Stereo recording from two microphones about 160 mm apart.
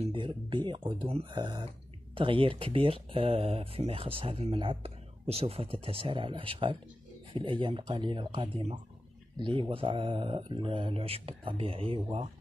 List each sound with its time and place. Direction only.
0.0 s speech: 30° right (ahead or behind)